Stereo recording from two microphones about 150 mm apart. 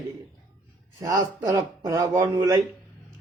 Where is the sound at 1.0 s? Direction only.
20° right (ahead or behind).